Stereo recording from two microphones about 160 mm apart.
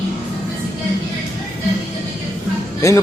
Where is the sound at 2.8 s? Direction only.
20° left (ahead or behind).